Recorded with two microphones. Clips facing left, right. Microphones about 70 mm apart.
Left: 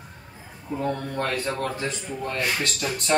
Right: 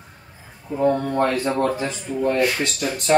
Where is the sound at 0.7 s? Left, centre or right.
Centre.